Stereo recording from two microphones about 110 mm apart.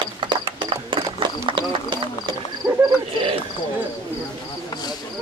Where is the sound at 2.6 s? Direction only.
25° right (ahead or behind).